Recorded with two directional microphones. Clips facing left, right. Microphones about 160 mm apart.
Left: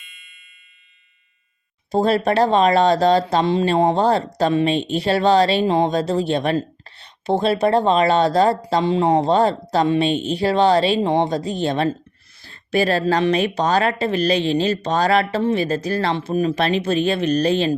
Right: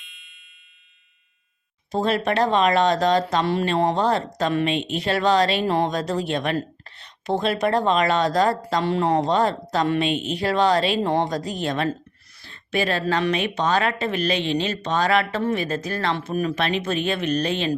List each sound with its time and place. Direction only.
0.0 s music: centre (ahead or behind)
1.9 s a woman's voice: 35° left (ahead or behind)
3.4 s speech: 20° left (ahead or behind)
3.9 s a woman's voice: 30° left (ahead or behind)
5.6 s speech: 20° left (ahead or behind)
5.9 s speech: 30° left (ahead or behind)
8.8 s speech: 15° left (ahead or behind)
9.2 s speech: 30° left (ahead or behind)
11.0 s speech: 15° left (ahead or behind)
11.3 s a woman's voice: 25° left (ahead or behind)